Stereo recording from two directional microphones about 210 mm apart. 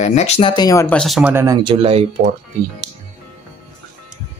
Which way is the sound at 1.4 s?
20° right (ahead or behind).